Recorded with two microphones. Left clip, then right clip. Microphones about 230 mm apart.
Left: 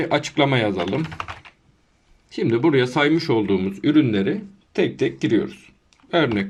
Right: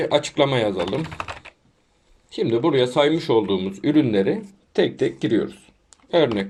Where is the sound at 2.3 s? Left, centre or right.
Left.